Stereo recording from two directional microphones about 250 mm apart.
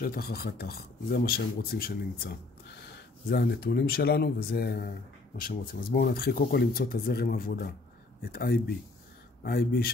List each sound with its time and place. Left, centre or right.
0.0 s speech: left